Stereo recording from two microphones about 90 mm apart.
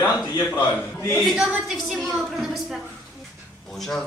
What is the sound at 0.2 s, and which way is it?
Speech, 45° left (ahead or behind).